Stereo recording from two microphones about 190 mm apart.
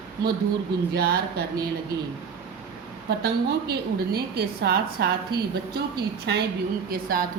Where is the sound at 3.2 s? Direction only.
60° right (ahead or behind).